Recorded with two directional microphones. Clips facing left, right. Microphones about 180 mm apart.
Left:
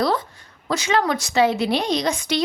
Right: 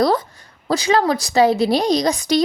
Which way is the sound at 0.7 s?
35° right (ahead or behind).